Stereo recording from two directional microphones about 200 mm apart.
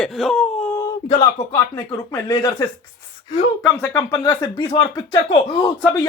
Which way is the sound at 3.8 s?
15° left (ahead or behind).